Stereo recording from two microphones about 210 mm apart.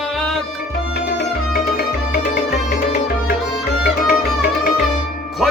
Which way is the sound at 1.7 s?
45° left (ahead or behind).